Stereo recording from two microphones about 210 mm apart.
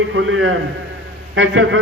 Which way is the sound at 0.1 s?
65° right (ahead or behind).